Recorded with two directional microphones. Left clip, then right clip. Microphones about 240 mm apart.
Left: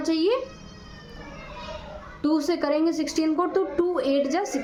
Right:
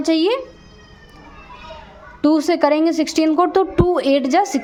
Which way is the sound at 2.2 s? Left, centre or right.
Right.